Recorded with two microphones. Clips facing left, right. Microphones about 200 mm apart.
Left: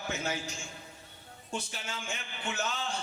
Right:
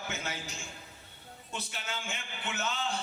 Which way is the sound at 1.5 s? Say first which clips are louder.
Left 3 dB; 30° left (ahead or behind).